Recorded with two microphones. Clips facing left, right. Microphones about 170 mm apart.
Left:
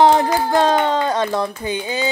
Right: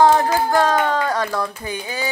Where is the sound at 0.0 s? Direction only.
20° left (ahead or behind).